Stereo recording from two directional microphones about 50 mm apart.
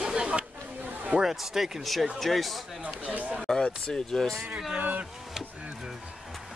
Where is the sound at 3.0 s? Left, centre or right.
Right.